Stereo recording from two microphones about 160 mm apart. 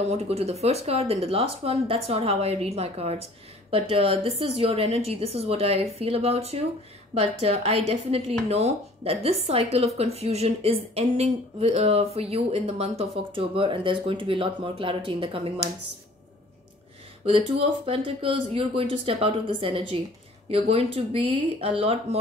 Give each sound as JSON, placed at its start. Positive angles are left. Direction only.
{"t": 0.1, "sound": "speech", "side_deg": -40}
{"t": 17.3, "sound": "speech", "side_deg": -35}